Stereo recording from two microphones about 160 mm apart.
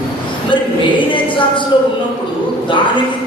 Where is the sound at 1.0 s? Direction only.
30° left (ahead or behind).